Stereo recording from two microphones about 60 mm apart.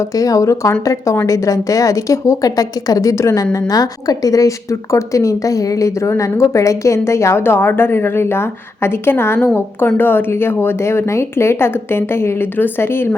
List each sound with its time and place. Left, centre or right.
0.1 s a woman's voice: left